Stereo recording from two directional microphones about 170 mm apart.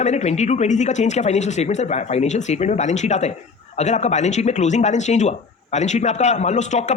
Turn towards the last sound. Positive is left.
turn(degrees=45)  # may be behind; listen again after turning